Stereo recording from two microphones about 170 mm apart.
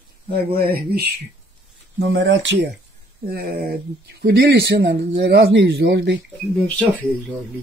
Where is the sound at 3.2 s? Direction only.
65° right (ahead or behind); by 6.1 s 90° right.